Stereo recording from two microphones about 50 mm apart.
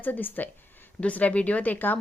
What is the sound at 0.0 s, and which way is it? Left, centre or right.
Speech, left.